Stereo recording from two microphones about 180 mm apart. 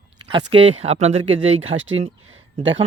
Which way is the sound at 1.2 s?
90° right.